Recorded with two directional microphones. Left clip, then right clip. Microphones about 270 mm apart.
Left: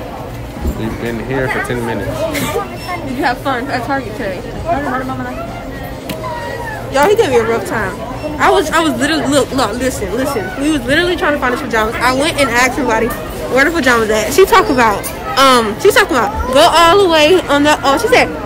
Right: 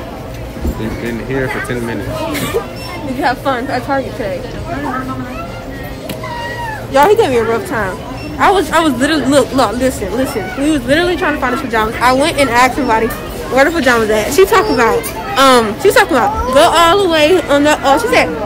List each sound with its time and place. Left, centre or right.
1.0 s speech: centre
3.2 s speech: centre
6.9 s speech: centre